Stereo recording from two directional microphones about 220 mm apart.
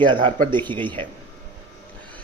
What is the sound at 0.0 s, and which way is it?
Speech, 20° right (ahead or behind).